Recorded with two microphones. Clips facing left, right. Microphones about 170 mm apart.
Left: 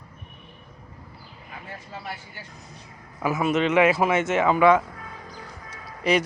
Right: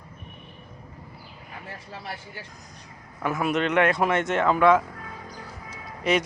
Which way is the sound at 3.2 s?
5° left (ahead or behind).